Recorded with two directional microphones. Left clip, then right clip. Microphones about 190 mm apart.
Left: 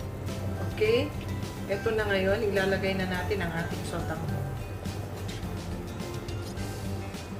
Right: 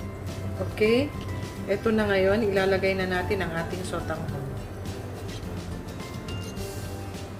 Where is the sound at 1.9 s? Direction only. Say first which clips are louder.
Right 4 dB; 60° right (ahead or behind).